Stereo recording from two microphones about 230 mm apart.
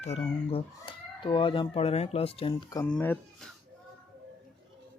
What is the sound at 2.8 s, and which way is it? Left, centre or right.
Speech, centre.